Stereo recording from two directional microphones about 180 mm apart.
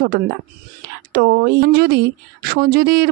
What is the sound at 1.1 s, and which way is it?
Speech, 65° right (ahead or behind).